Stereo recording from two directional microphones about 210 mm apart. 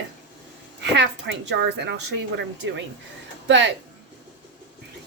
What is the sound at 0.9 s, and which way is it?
A woman's voice, 55° right (ahead or behind).